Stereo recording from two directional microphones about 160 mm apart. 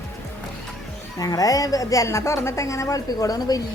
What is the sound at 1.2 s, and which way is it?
A woman's voice, 25° left (ahead or behind).